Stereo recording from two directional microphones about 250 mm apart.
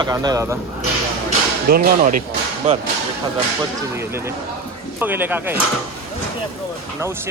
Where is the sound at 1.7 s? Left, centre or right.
Right.